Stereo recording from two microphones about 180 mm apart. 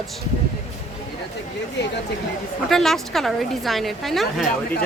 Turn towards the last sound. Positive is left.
turn(degrees=0)  # may be behind; listen again after turning